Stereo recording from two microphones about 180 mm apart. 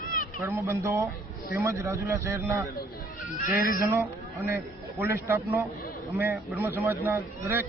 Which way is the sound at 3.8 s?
15° right (ahead or behind).